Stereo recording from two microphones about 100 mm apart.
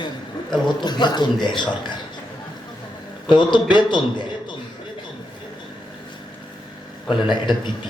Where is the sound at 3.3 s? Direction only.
50° left (ahead or behind).